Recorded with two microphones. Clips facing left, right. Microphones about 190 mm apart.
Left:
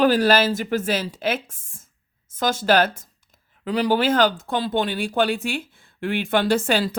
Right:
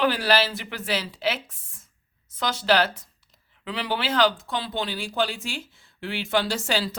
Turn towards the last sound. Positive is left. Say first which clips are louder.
# left 7 dB
turn(degrees=55)  # may be behind; listen again after turning